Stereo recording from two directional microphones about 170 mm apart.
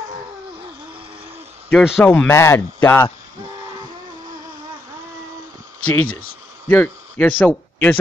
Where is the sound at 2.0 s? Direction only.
10° left (ahead or behind).